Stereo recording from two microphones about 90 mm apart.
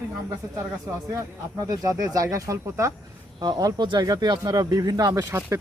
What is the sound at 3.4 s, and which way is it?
Speech, 45° right (ahead or behind).